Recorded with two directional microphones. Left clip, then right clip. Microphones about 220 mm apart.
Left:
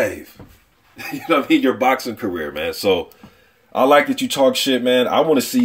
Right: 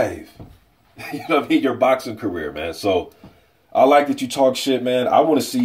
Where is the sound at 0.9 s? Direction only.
40° left (ahead or behind).